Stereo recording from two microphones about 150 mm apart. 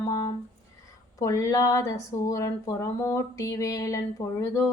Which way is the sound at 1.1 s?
20° left (ahead or behind).